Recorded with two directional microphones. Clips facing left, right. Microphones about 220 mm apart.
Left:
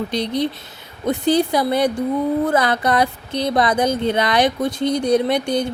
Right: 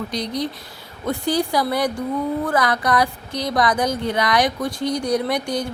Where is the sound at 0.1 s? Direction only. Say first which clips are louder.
Left 4 dB; 25° left (ahead or behind).